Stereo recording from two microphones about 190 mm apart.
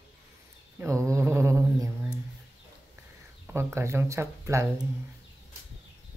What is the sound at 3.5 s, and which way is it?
Speech, 15° right (ahead or behind).